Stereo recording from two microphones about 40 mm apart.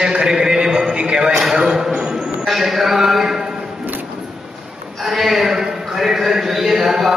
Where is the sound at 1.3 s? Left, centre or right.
Centre.